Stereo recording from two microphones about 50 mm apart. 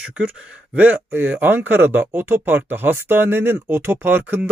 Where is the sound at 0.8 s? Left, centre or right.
Right.